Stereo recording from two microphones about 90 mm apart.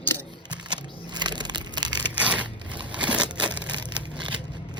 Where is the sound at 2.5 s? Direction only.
60° right (ahead or behind).